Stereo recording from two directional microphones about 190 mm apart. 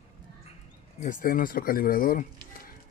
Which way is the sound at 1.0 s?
45° left (ahead or behind).